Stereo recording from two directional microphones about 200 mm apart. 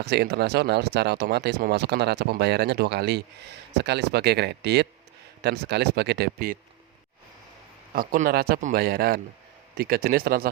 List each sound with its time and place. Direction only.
0.0 s speech: 55° right (ahead or behind)
7.9 s speech: 45° right (ahead or behind)